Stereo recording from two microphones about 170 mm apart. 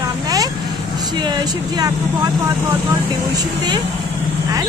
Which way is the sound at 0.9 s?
25° right (ahead or behind).